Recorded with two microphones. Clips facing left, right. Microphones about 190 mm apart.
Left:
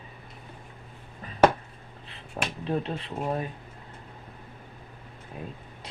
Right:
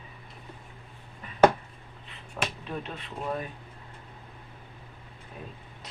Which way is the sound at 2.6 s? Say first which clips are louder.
Left 7 dB; 30° left (ahead or behind).